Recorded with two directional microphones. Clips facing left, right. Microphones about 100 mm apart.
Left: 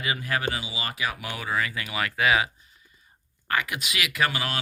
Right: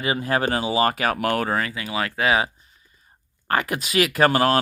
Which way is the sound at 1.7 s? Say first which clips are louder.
Right 3 dB; 30° right (ahead or behind).